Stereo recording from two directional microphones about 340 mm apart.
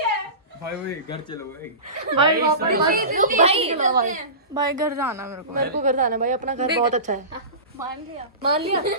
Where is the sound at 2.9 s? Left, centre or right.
Right.